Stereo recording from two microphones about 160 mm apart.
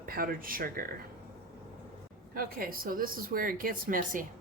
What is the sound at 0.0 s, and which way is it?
Speech, 65° right (ahead or behind).